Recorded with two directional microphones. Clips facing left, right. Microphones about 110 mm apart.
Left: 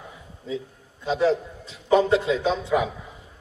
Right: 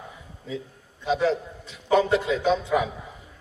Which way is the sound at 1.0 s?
35° left (ahead or behind).